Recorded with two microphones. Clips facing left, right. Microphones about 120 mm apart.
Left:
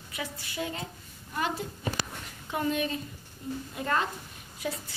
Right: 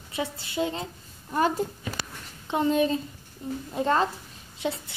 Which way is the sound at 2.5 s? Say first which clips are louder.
Right 6 dB; 30° right (ahead or behind).